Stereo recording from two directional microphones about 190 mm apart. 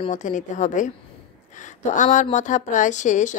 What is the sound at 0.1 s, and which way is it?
Speech, 40° left (ahead or behind).